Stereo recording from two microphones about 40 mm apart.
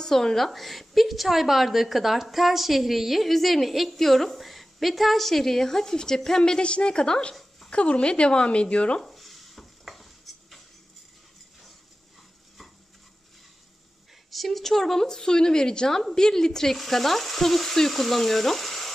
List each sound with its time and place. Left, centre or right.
0.0 s a woman's voice: centre; by 9.0 s left
9.0 s stir: centre
14.3 s a woman's voice: centre